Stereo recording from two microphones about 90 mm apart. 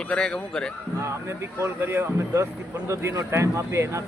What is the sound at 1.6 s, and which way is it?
Speech, 25° right (ahead or behind).